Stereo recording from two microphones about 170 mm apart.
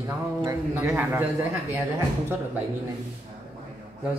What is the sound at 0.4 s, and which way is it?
Speech, 15° right (ahead or behind).